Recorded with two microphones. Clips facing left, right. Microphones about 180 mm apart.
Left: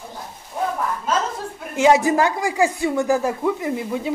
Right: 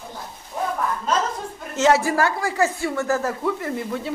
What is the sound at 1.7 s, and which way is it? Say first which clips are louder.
Speech: left 3 dB; 15° left (ahead or behind).